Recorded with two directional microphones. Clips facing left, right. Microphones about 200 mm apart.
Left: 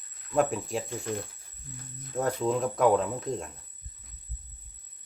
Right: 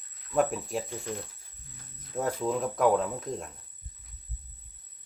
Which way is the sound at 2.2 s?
5° right (ahead or behind).